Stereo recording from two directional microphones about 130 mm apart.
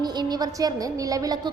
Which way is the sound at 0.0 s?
30° right (ahead or behind).